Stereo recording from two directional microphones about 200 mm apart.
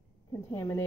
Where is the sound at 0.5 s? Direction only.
15° left (ahead or behind).